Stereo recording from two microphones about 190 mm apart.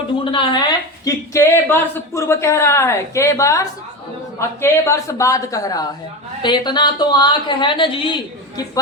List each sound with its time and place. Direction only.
0.3 s a woman's voice: 25° left (ahead or behind)
1.0 s a woman's voice: 15° left (ahead or behind)